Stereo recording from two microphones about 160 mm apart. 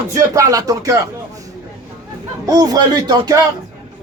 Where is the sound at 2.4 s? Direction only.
20° right (ahead or behind).